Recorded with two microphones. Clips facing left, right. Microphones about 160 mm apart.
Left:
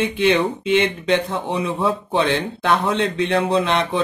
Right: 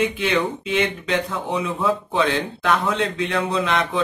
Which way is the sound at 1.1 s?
30° left (ahead or behind).